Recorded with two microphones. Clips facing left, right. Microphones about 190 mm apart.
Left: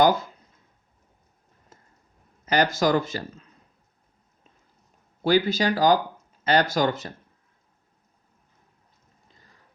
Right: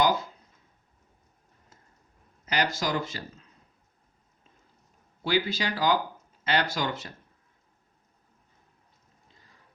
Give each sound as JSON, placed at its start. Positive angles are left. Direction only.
{"t": 2.5, "sound": "speech", "side_deg": 50}
{"t": 5.2, "sound": "speech", "side_deg": 45}